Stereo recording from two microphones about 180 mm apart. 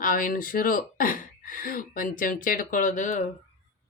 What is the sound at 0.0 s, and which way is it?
Speech, 50° left (ahead or behind).